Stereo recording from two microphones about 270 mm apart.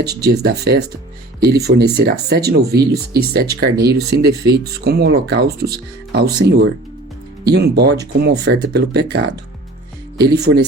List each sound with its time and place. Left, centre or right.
0.2 s speech: right